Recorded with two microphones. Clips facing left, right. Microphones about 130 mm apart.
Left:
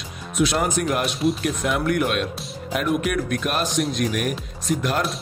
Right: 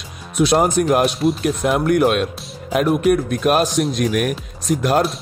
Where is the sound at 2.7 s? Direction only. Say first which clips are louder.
Right 7 dB; 40° right (ahead or behind).